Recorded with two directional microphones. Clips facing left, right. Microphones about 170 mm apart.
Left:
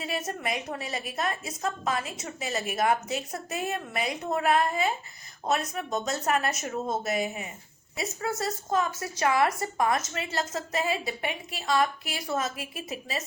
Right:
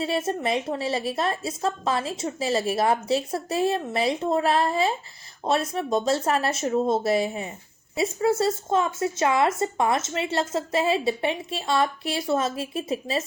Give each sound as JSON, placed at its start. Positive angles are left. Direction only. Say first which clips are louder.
{"t": 0.0, "sound": "speech", "louder": "right 7 dB", "side_deg": -30}